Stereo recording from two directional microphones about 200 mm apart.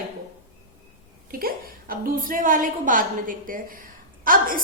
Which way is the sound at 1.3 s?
45° right (ahead or behind).